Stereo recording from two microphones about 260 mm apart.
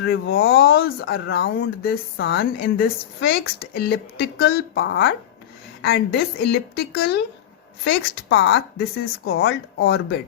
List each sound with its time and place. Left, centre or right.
0.0 s a woman's voice: left